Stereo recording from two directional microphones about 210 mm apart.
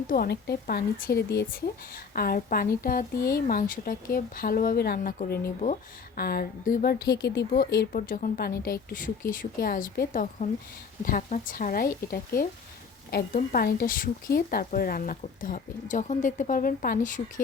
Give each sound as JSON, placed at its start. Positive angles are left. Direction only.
{"t": 0.1, "sound": "speech", "side_deg": 50}